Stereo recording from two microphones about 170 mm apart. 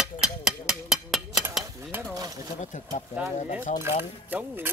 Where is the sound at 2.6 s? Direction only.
45° left (ahead or behind).